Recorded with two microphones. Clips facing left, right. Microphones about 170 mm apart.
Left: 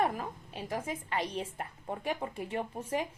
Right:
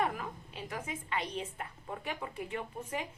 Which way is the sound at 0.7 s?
40° left (ahead or behind).